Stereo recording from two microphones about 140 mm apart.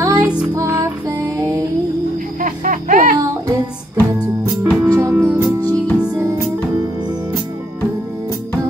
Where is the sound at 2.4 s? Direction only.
75° right (ahead or behind).